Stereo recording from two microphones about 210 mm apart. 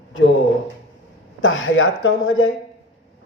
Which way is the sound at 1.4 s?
65° left (ahead or behind).